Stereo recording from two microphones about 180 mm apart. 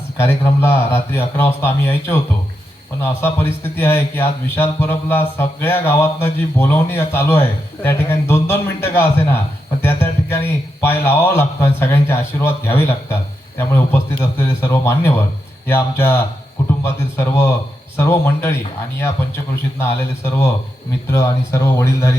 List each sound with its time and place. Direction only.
0.2 s a man's voice: 15° left (ahead or behind)
19.8 s a man's voice: 15° left (ahead or behind)